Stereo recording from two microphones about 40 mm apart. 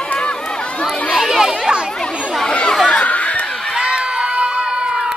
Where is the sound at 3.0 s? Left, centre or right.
Left.